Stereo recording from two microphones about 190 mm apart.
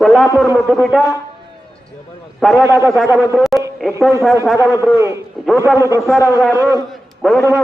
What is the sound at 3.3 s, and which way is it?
Speech, centre (ahead or behind).